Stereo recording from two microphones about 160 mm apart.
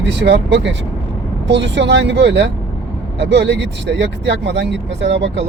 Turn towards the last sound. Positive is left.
turn(degrees=-90)